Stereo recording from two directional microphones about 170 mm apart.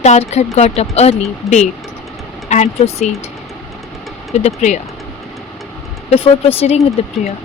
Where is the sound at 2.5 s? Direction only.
40° left (ahead or behind).